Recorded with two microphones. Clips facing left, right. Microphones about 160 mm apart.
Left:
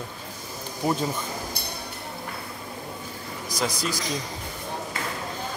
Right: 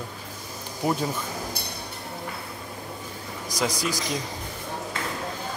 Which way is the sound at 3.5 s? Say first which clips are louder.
Right 1 dB; 15° right (ahead or behind).